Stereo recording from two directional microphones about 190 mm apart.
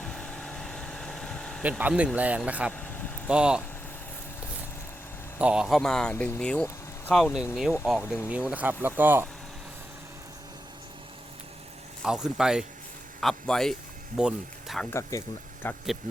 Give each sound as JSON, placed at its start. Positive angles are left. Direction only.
{"t": 0.0, "sound": "vehicle", "side_deg": 5}
{"t": 1.8, "sound": "speech", "side_deg": -5}
{"t": 5.4, "sound": "speech", "side_deg": -5}
{"t": 8.0, "sound": "speech", "side_deg": 15}
{"t": 8.3, "sound": "speech", "side_deg": -10}
{"t": 12.0, "sound": "speech", "side_deg": -5}
{"t": 15.1, "sound": "speech", "side_deg": 15}